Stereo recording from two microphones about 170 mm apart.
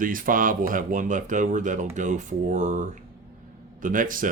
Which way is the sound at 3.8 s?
55° right (ahead or behind).